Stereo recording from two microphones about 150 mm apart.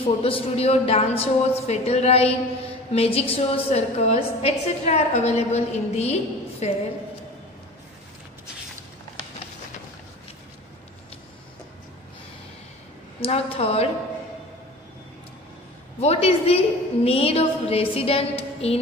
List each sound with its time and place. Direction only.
0.0 s a woman's voice: 40° left (ahead or behind)
13.2 s a woman's voice: 40° left (ahead or behind)
16.0 s a woman's voice: 45° left (ahead or behind)